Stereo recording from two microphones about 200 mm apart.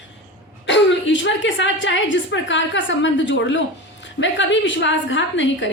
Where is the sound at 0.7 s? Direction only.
65° left (ahead or behind).